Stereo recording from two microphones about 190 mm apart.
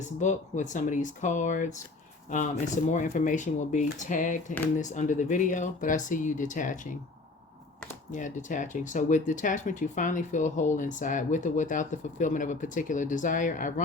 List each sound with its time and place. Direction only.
0.2 s speech: 40° left (ahead or behind)
8.1 s speech: 40° left (ahead or behind)